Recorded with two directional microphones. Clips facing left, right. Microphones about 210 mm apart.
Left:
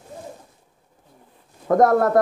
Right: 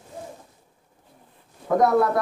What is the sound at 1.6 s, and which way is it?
Speech, 50° left (ahead or behind).